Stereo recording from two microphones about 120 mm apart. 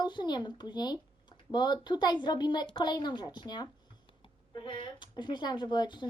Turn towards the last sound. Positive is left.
turn(degrees=40)  # may be behind; listen again after turning